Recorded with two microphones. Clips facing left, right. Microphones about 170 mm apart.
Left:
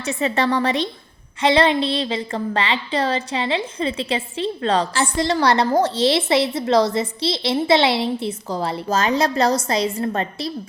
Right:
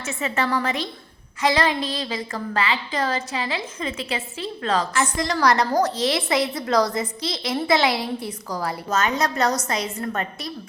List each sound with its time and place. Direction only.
0.0 s a woman's voice: 35° left (ahead or behind)